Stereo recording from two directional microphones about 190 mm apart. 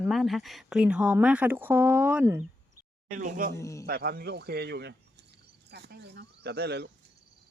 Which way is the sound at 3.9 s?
55° right (ahead or behind).